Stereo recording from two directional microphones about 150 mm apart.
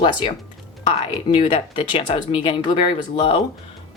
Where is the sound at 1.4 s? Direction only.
35° left (ahead or behind).